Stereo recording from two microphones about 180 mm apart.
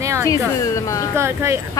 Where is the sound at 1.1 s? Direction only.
15° right (ahead or behind).